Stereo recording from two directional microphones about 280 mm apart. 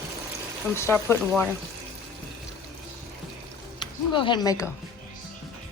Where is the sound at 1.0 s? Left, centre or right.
Centre.